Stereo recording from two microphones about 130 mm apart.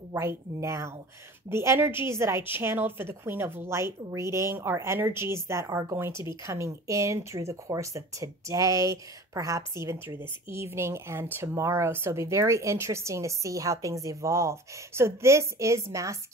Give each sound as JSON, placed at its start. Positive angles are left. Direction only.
{"t": 0.1, "sound": "a woman's voice", "side_deg": -20}